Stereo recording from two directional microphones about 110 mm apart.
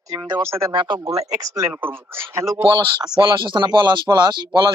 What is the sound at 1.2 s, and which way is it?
Speech, 30° right (ahead or behind).